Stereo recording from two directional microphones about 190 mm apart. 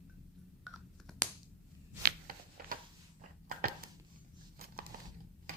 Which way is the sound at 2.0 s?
50° right (ahead or behind).